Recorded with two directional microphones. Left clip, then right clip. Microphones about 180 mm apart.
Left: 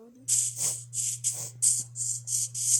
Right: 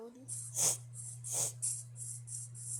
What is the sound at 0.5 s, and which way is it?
Music, 10° right (ahead or behind).